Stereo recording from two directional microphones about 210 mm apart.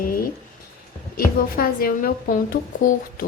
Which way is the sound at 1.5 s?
45° left (ahead or behind).